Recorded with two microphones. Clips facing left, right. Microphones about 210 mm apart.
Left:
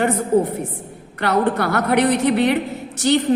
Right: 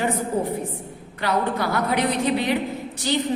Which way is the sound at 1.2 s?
65° left (ahead or behind).